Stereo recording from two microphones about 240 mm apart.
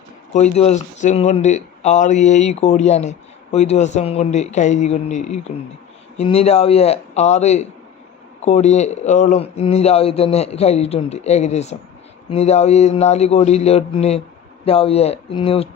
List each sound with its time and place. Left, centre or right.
0.3 s speech: left